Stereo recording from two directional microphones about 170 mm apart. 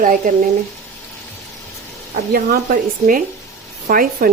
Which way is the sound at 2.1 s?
70° right (ahead or behind).